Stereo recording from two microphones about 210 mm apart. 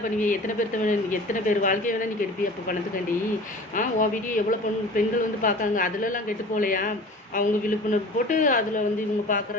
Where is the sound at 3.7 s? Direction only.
40° left (ahead or behind).